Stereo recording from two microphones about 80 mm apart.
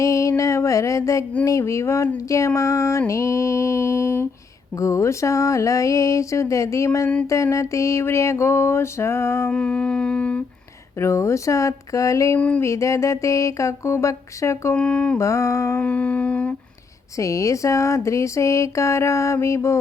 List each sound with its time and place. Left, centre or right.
0.0 s speech: left
9.5 s humming: centre
11.0 s speech: left
12.4 s humming: centre
12.6 s speech: left
14.8 s humming: centre
15.2 s speech: left
15.8 s humming: centre
17.2 s speech: left